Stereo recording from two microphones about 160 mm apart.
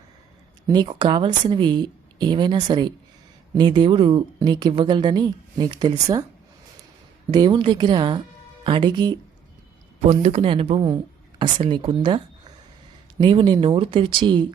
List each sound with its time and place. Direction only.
0.7 s a woman's voice: 30° right (ahead or behind)
7.3 s a woman's voice: 30° right (ahead or behind)
10.1 s speech: 40° right (ahead or behind)